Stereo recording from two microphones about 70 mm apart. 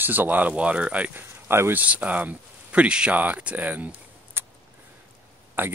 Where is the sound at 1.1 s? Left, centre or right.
Right.